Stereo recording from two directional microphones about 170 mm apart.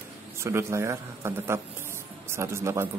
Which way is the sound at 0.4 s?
15° right (ahead or behind).